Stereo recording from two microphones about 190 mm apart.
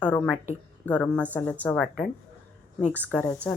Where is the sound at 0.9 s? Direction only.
5° left (ahead or behind).